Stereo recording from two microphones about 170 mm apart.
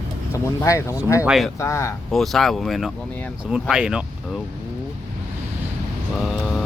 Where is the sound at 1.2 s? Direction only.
5° right (ahead or behind).